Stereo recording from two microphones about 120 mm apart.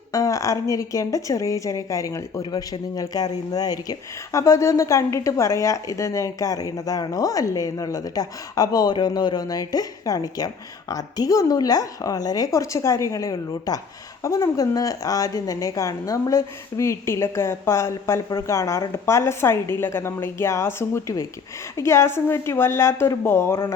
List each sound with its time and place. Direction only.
0.1 s a woman's voice: 25° left (ahead or behind)